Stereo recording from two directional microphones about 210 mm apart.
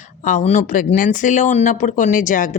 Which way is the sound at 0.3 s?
35° left (ahead or behind).